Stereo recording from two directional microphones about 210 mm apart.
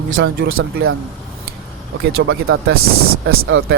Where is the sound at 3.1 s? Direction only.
80° right.